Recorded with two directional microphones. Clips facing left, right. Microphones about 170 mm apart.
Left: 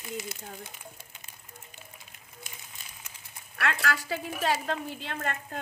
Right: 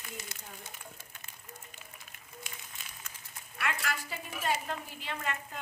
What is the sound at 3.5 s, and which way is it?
A woman's voice, 75° left (ahead or behind).